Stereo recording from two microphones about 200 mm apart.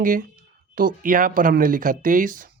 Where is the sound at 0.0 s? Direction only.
40° right (ahead or behind).